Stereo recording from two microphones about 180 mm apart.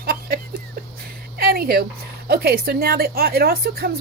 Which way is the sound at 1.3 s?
60° right (ahead or behind).